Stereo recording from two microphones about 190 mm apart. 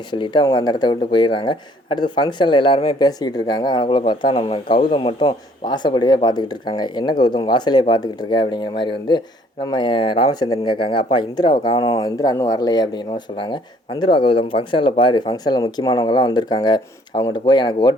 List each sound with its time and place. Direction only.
0.1 s speech: 25° left (ahead or behind)